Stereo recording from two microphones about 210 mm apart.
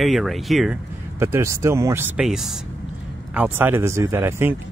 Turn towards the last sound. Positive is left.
turn(degrees=-10)  # may be behind; listen again after turning